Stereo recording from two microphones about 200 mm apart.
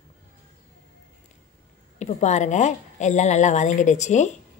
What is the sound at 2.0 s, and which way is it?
A woman's voice, 35° left (ahead or behind).